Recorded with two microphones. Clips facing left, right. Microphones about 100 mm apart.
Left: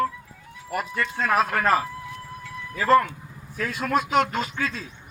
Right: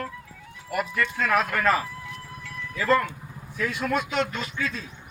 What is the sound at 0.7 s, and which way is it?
Speech, 25° left (ahead or behind).